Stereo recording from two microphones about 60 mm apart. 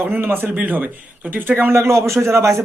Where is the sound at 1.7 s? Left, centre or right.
Right.